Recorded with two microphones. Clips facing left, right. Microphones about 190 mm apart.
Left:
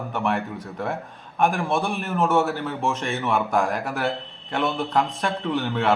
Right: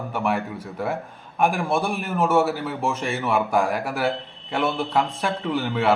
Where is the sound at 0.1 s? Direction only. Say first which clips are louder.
Right 1 dB; centre (ahead or behind).